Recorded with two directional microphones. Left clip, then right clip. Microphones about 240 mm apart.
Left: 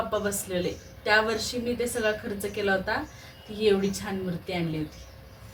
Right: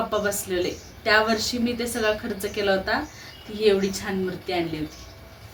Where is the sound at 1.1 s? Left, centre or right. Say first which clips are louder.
Right 3 dB; right.